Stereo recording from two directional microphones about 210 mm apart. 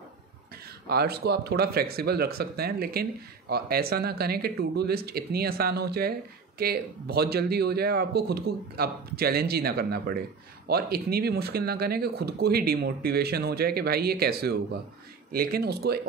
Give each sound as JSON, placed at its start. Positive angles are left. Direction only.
{"t": 0.8, "sound": "speech", "side_deg": -50}